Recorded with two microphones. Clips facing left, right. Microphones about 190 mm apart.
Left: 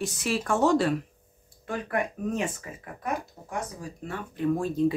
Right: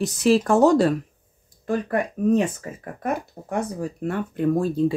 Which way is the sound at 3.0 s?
60° right (ahead or behind).